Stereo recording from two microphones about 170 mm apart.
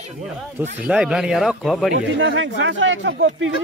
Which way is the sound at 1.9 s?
90° right.